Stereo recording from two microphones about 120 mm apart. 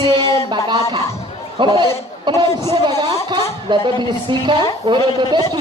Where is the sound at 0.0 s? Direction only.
45° right (ahead or behind).